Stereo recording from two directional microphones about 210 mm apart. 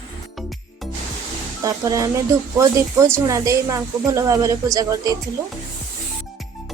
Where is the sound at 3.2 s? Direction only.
15° right (ahead or behind).